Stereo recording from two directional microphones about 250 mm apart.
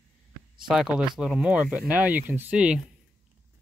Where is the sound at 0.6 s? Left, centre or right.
Centre.